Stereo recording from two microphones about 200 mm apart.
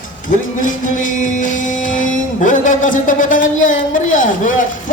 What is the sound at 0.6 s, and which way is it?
Music, 40° left (ahead or behind).